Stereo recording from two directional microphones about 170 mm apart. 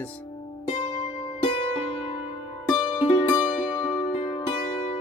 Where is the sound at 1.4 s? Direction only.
30° left (ahead or behind).